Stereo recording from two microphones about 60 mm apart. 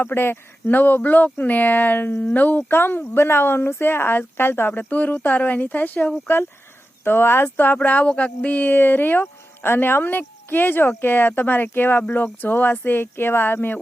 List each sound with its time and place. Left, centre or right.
0.0 s speech: left
7.8 s speech: left